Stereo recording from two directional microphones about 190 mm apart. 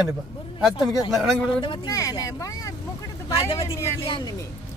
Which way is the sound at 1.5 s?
25° left (ahead or behind).